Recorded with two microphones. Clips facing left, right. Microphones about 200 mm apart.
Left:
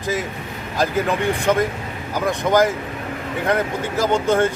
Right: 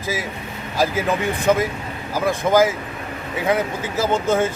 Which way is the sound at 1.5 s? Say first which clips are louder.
Right 3 dB; 5° right (ahead or behind).